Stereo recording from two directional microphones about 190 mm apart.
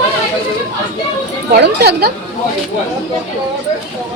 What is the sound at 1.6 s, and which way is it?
Speech, 60° right (ahead or behind).